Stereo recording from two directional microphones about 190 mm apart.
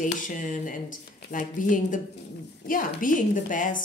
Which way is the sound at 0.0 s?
45° left (ahead or behind).